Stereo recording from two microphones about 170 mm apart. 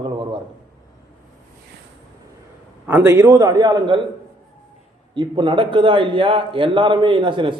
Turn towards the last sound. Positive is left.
turn(degrees=-30)  # may be behind; listen again after turning